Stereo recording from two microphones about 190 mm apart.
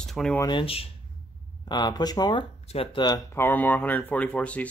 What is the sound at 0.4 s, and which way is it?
Speech, 25° left (ahead or behind).